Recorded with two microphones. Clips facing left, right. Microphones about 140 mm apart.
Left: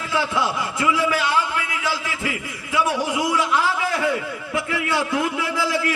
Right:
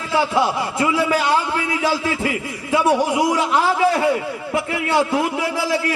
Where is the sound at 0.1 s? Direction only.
30° right (ahead or behind).